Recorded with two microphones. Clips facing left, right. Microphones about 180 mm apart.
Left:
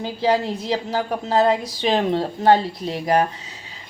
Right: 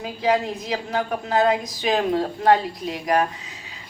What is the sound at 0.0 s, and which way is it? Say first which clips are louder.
A woman's voice: left 1 dB; 30° left (ahead or behind).